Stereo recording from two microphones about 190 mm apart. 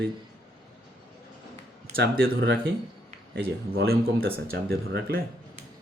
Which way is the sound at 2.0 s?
90° right.